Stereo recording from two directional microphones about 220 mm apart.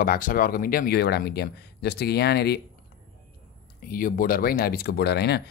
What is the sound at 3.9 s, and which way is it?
Speech, 40° left (ahead or behind).